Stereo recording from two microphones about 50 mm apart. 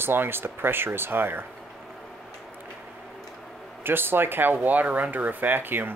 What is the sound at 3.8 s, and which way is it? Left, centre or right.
Speech, right.